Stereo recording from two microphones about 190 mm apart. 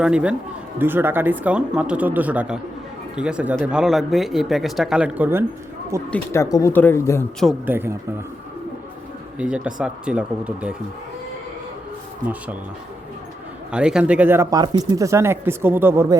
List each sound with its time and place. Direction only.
0.0 s speech: 5° right (ahead or behind)
6.1 s speech: 10° left (ahead or behind)
7.6 s speech: 10° right (ahead or behind)
9.4 s speech: 5° right (ahead or behind)
13.7 s speech: 5° right (ahead or behind)